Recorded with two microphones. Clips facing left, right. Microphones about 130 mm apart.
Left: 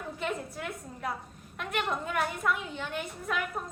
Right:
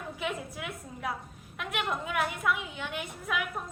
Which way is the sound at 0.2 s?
5° right (ahead or behind).